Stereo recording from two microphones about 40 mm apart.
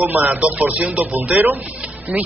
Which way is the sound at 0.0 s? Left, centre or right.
Right.